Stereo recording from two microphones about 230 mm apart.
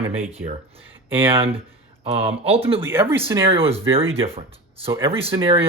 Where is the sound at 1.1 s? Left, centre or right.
Centre.